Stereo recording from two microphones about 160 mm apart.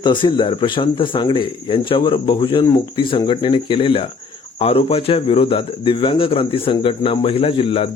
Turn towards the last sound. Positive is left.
turn(degrees=35)  # may be behind; listen again after turning